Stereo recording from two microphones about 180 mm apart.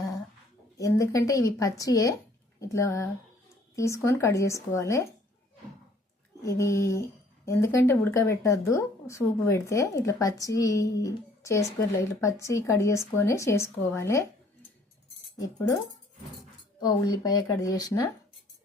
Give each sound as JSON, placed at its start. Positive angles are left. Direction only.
{"t": 0.8, "sound": "speech", "side_deg": 20}
{"t": 6.4, "sound": "speech", "side_deg": 15}
{"t": 15.4, "sound": "speech", "side_deg": 20}
{"t": 16.8, "sound": "speech", "side_deg": 20}